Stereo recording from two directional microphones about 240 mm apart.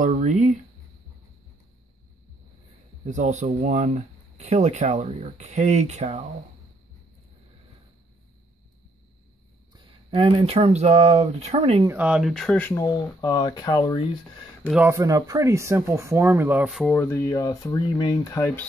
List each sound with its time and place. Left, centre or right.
0.0 s speech: right
3.1 s speech: right
9.7 s speech: centre
11.9 s speech: centre
14.6 s speech: centre
16.9 s speech: centre